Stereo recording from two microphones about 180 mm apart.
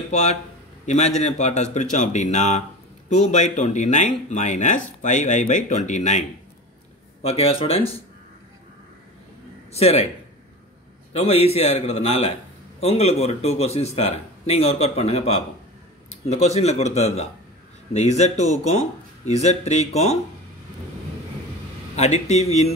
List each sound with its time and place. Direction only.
0.1 s speech: 40° left (ahead or behind)
7.2 s speech: 35° left (ahead or behind)
9.7 s speech: 35° left (ahead or behind)
11.1 s speech: 35° left (ahead or behind)
21.9 s speech: 40° left (ahead or behind)